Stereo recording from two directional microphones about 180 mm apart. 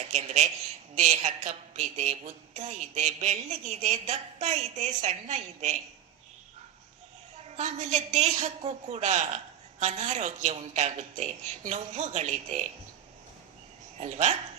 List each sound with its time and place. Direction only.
0.0 s a woman's voice: 40° right (ahead or behind)
7.5 s a woman's voice: 40° right (ahead or behind)
14.0 s a woman's voice: 40° right (ahead or behind)